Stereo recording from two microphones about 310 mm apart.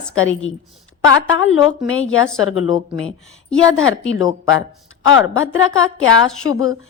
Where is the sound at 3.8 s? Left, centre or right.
Left.